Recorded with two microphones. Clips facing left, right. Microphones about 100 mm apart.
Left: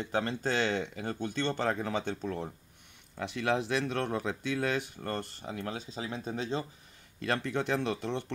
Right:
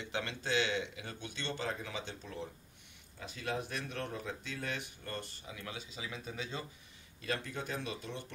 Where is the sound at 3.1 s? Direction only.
75° left (ahead or behind); by 6.6 s 35° left (ahead or behind).